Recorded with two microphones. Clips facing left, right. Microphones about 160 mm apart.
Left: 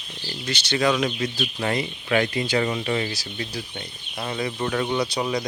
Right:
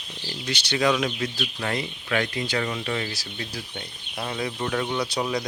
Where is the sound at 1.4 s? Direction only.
20° left (ahead or behind).